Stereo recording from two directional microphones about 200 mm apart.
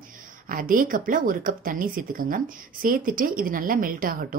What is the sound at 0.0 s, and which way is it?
Speech, 40° right (ahead or behind).